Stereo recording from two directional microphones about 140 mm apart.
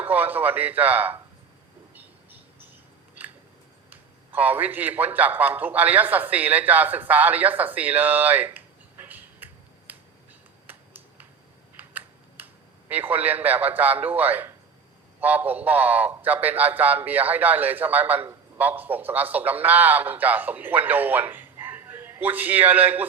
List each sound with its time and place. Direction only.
0.0 s a man's voice: 10° right (ahead or behind)
3.8 s a man's voice: 10° right (ahead or behind)
10.7 s a sound: 15° right (ahead or behind)
12.9 s a man's voice: 10° right (ahead or behind)